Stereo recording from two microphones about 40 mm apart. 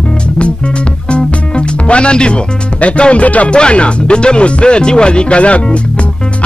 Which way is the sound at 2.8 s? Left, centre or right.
Left.